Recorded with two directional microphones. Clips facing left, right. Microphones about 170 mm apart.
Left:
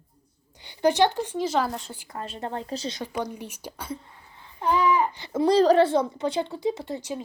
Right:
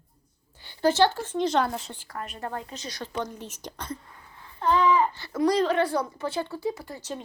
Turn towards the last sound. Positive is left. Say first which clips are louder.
# left 4 dB
turn(degrees=20)  # may be behind; listen again after turning